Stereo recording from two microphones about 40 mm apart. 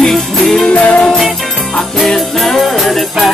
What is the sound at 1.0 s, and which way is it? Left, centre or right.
Music, centre.